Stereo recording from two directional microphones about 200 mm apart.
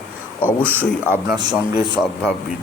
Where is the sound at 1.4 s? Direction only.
20° right (ahead or behind).